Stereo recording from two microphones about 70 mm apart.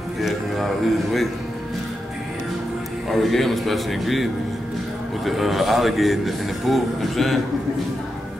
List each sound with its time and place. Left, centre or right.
0.2 s speech: centre
3.1 s speech: centre